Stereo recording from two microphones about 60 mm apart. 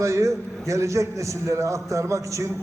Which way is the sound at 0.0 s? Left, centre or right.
Right.